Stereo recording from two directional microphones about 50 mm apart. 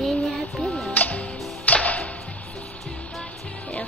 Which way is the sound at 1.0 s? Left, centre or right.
Left.